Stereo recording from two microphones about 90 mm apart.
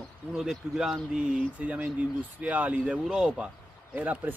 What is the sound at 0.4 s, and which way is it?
Speech, 5° right (ahead or behind).